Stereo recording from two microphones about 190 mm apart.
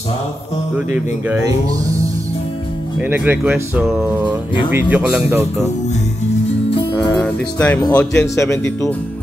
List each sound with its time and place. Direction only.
0.7 s speech: 5° right (ahead or behind)
3.0 s speech: 10° right (ahead or behind)
7.0 s speech: 5° left (ahead or behind)